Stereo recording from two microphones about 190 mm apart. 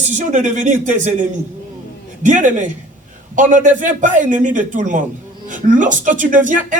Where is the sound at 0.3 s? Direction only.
40° right (ahead or behind).